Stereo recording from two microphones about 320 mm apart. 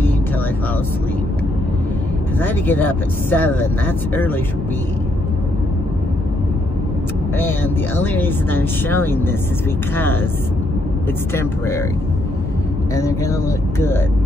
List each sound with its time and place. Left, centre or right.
2.4 s speech: centre
7.3 s speech: centre
12.9 s speech: centre